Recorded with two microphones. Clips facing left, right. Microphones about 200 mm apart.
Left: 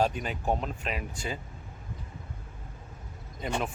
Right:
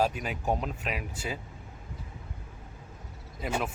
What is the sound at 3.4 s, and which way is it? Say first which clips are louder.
Speech: even; 5° right (ahead or behind).